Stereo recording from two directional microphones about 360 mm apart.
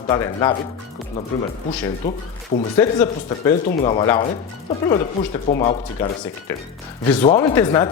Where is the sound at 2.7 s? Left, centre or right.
Centre.